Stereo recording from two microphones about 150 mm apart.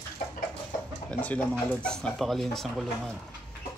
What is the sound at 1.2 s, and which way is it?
Speech, 10° left (ahead or behind).